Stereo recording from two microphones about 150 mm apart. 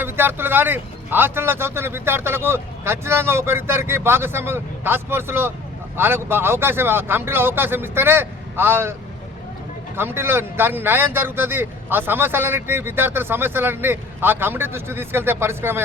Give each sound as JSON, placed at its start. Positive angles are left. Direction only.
{"t": 0.0, "sound": "speech", "side_deg": -15}